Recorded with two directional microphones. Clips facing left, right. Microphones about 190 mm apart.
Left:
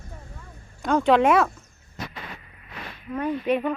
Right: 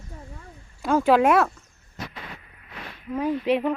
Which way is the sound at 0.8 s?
5° right (ahead or behind).